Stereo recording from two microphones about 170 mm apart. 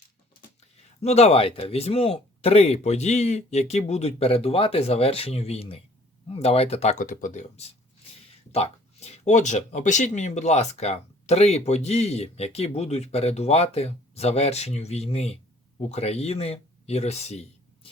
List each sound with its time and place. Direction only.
1.0 s speech: 40° left (ahead or behind)